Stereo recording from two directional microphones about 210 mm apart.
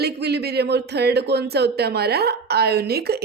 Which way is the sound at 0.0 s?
50° right (ahead or behind).